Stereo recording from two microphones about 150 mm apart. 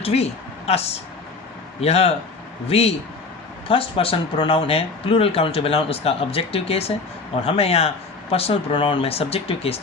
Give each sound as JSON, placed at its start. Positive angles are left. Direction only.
{"t": 0.0, "sound": "a man's voice", "side_deg": 45}